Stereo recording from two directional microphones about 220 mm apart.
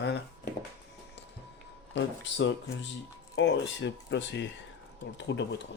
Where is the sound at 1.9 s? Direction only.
55° left (ahead or behind).